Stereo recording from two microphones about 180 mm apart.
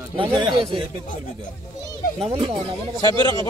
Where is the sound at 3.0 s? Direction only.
25° right (ahead or behind).